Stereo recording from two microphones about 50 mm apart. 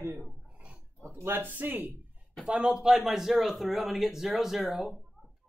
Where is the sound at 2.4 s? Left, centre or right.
Centre.